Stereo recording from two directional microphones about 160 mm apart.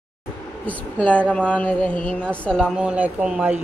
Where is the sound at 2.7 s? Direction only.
5° right (ahead or behind).